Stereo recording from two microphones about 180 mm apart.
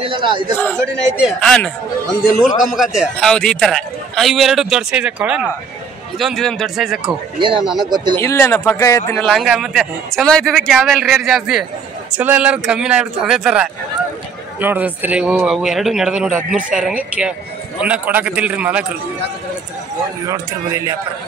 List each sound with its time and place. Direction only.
0.0 s a man's voice: 25° right (ahead or behind)
0.7 s a man's voice: 5° right (ahead or behind)
7.3 s a man's voice: 25° right (ahead or behind)
7.6 s a man's voice: 5° right (ahead or behind)
7.9 s a man's voice: 25° right (ahead or behind)
8.2 s speech: 15° left (ahead or behind)
9.2 s a man's voice: centre (ahead or behind)
20.2 s a man's voice: 15° right (ahead or behind)